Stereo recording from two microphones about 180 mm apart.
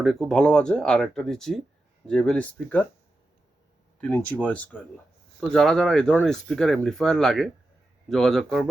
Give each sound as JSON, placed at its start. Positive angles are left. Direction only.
{"t": 0.0, "sound": "speech", "side_deg": 0}
{"t": 4.0, "sound": "speech", "side_deg": 5}